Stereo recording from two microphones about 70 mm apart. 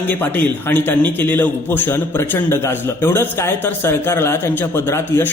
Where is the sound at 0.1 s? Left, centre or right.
Left.